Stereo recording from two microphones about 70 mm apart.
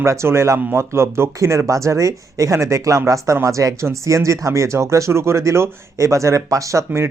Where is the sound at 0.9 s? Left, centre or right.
Right.